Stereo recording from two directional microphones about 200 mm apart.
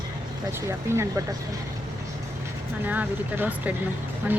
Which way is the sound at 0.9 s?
15° right (ahead or behind).